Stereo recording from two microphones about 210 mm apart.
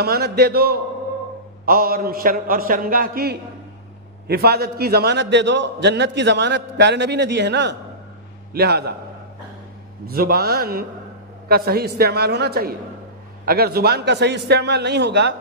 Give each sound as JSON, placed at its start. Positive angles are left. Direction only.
{"t": 0.0, "sound": "a man's voice", "side_deg": -50}
{"t": 10.0, "sound": "a man's voice", "side_deg": -45}